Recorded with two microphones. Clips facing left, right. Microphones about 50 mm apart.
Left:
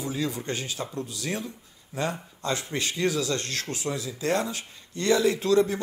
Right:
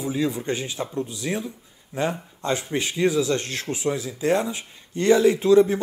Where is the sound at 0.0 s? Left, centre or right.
Centre.